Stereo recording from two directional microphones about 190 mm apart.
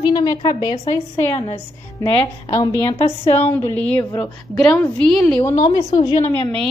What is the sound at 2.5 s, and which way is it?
Speech, 20° left (ahead or behind).